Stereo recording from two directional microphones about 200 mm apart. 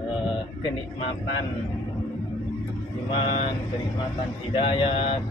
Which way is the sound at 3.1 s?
25° left (ahead or behind).